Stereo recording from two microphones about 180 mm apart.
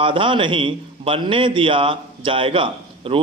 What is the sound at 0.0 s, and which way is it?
A man's voice, 30° right (ahead or behind).